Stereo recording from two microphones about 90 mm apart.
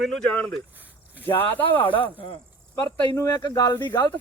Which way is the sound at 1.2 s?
25° left (ahead or behind).